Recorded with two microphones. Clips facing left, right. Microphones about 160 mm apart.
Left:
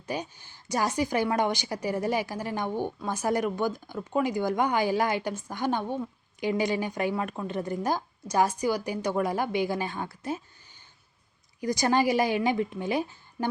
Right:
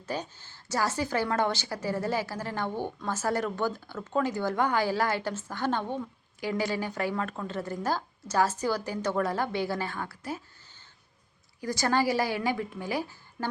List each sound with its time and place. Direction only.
0.0 s a woman's voice: 15° left (ahead or behind)
11.6 s a woman's voice: 15° left (ahead or behind)